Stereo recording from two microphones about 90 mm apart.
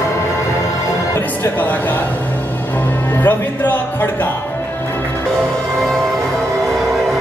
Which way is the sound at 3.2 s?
20° left (ahead or behind).